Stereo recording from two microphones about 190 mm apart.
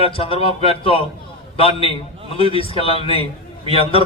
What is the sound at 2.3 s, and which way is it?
A man's voice, 30° left (ahead or behind).